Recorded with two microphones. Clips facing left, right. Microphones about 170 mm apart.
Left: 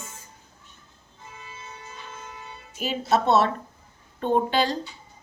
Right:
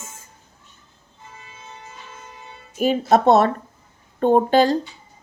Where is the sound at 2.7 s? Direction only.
50° right (ahead or behind).